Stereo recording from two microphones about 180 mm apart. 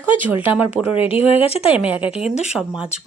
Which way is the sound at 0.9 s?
30° left (ahead or behind).